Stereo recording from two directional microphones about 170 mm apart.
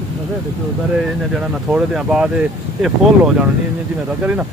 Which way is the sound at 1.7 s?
5° right (ahead or behind).